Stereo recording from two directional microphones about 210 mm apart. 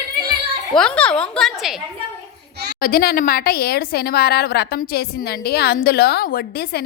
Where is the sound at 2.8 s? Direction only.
45° left (ahead or behind).